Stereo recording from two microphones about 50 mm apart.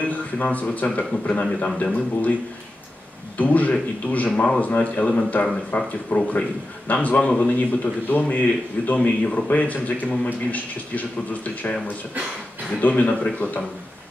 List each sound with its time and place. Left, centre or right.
0.0 s a sound: left
0.7 s a man's voice: left
3.3 s a man's voice: left
12.8 s a man's voice: left